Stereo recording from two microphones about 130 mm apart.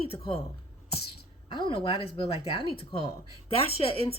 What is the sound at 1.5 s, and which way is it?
Speech, 40° left (ahead or behind).